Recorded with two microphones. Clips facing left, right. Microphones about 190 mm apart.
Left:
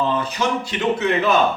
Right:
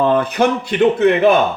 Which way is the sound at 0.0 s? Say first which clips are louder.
Right 7 dB; 55° right (ahead or behind).